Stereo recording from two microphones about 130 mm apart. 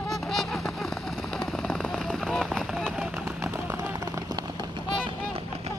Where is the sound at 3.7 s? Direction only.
20° right (ahead or behind).